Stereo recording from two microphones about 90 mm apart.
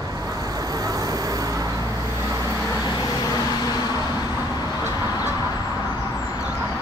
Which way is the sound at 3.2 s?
50° left (ahead or behind).